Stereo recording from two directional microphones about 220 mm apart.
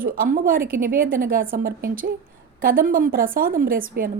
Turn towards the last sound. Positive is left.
turn(degrees=-40)  # may be behind; listen again after turning